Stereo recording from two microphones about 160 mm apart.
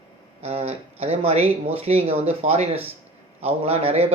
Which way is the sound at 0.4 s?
40° right (ahead or behind).